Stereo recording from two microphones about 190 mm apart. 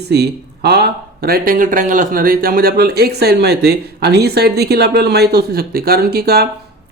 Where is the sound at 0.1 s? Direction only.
60° right (ahead or behind).